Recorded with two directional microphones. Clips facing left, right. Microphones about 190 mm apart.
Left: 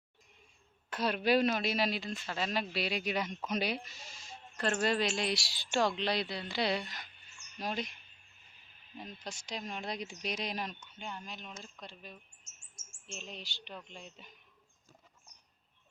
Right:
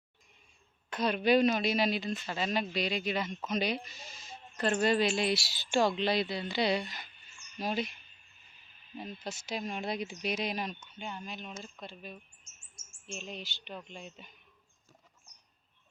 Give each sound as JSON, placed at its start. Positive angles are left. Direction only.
{"t": 0.9, "sound": "speech", "side_deg": 5}
{"t": 9.0, "sound": "speech", "side_deg": -5}